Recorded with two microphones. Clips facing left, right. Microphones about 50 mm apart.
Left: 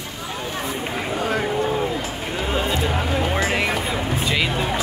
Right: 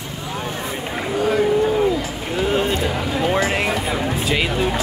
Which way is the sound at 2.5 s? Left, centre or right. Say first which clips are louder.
Even; right.